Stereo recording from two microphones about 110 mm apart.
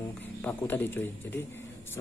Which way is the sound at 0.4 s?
15° left (ahead or behind).